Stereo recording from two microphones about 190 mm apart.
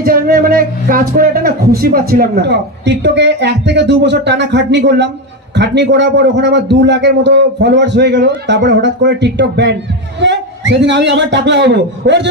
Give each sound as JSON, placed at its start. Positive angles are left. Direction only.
{"t": 0.0, "sound": "a man's voice", "side_deg": -50}